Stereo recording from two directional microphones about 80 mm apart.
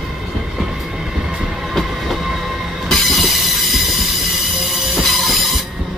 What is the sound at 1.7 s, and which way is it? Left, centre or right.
Train, centre.